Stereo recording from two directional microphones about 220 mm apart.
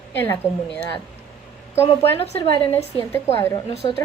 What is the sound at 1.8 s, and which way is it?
Speech, 25° left (ahead or behind).